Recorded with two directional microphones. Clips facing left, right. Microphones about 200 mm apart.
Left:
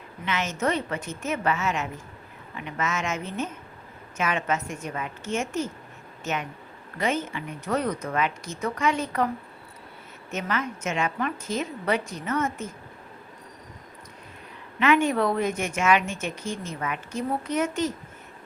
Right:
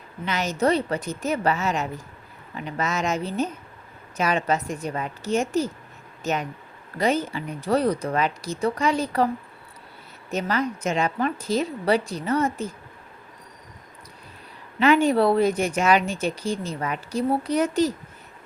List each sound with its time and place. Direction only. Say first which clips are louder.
0.3 s a woman's voice: right 4 dB; 35° right (ahead or behind)
10.3 s a woman's voice: right 4 dB; 35° right (ahead or behind)
14.8 s a woman's voice: right 4 dB; 35° right (ahead or behind)